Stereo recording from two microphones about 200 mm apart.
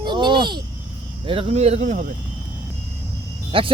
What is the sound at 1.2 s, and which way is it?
Speech, 30° right (ahead or behind).